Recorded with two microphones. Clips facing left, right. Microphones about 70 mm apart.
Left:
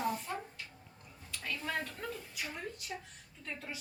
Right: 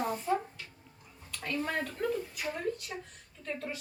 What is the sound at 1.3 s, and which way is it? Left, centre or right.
A woman's voice, centre.